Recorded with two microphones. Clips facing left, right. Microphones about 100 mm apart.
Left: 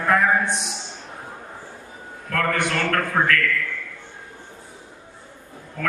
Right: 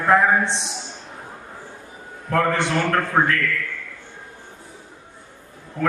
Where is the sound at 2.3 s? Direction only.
25° right (ahead or behind).